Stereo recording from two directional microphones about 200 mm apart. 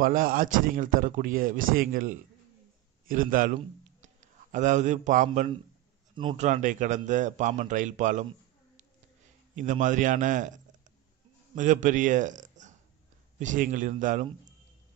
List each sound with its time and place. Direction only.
0.0 s a man's voice: 45° right (ahead or behind)
9.6 s a man's voice: 40° right (ahead or behind)